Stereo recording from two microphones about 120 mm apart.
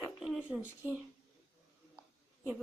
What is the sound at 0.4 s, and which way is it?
Speech, 10° right (ahead or behind).